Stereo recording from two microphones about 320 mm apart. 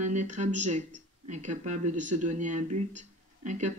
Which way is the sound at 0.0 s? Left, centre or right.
Right.